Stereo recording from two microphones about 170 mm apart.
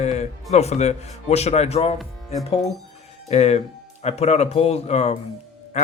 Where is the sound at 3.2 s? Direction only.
40° left (ahead or behind).